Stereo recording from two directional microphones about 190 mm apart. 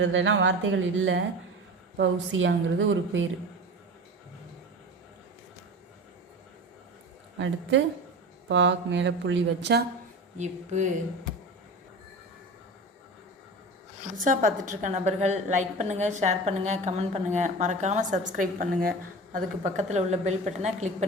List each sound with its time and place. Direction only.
0.0 s speech: 80° right
2.0 s a woman's voice: 75° right (ahead or behind)
7.3 s speech: 75° right (ahead or behind)
10.3 s a woman's voice: 40° right (ahead or behind)
14.2 s a woman's voice: 45° right (ahead or behind)